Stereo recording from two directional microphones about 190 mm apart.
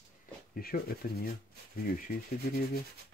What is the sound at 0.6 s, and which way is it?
Speech, 50° left (ahead or behind).